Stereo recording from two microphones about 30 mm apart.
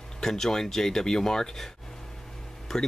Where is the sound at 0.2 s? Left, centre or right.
Centre.